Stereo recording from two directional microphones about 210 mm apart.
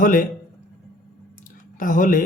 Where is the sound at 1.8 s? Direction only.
40° left (ahead or behind).